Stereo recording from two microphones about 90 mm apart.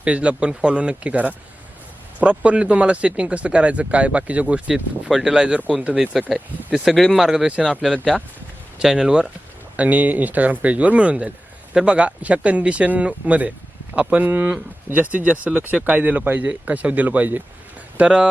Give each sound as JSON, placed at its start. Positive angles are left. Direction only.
{"t": 0.0, "sound": "speech", "side_deg": -15}